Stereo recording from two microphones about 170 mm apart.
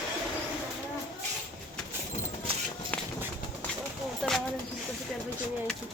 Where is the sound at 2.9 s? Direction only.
10° left (ahead or behind).